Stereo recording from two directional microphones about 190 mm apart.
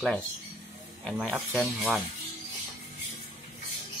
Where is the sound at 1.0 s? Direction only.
5° left (ahead or behind).